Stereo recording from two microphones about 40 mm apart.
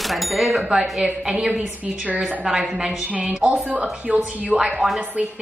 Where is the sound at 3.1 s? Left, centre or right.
Right.